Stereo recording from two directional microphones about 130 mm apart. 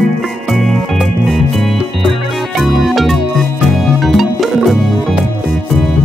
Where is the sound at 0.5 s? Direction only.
Centre (ahead or behind).